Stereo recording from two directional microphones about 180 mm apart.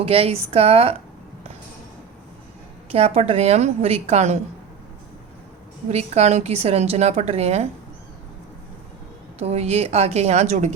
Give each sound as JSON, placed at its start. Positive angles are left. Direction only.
{"t": 0.0, "sound": "a woman's voice", "side_deg": -30}
{"t": 2.9, "sound": "a woman's voice", "side_deg": -35}
{"t": 5.9, "sound": "a woman's voice", "side_deg": -35}
{"t": 9.4, "sound": "a woman's voice", "side_deg": -35}